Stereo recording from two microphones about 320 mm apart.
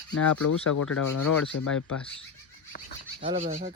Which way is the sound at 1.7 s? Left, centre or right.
Centre.